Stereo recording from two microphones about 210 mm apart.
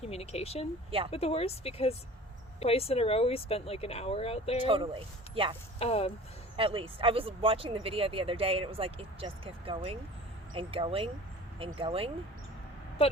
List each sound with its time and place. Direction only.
0.0 s speech: 30° left (ahead or behind)
0.9 s speech: 25° right (ahead or behind)
1.1 s speech: 30° left (ahead or behind)
4.6 s speech: 25° right (ahead or behind)
5.8 s speech: 30° left (ahead or behind)
6.6 s speech: 25° right (ahead or behind)